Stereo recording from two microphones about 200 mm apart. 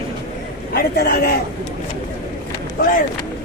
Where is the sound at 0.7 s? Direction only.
50° left (ahead or behind).